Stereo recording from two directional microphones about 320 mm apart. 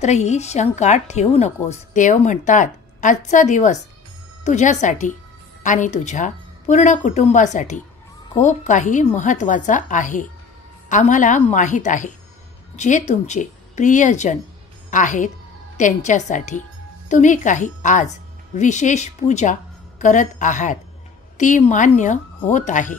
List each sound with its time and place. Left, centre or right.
0.0 s a woman's voice: left